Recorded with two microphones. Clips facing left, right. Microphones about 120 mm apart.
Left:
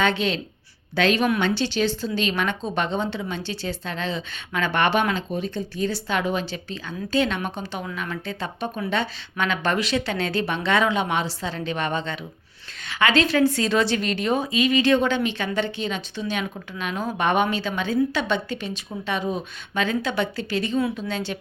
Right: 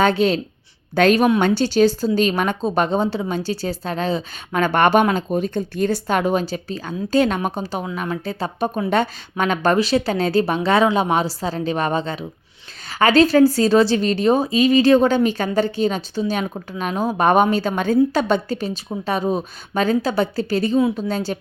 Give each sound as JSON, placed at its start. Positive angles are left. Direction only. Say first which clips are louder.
{"t": 0.0, "sound": "a woman's voice", "louder": "right 6 dB", "side_deg": -40}